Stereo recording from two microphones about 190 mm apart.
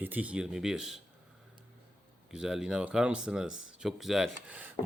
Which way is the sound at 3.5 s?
90° left.